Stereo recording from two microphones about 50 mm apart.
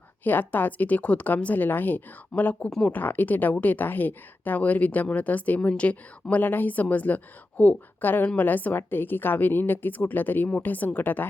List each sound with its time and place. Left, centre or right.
0.3 s a woman's voice: left
2.3 s a woman's voice: left
6.3 s a woman's voice: left
8.0 s a woman's voice: left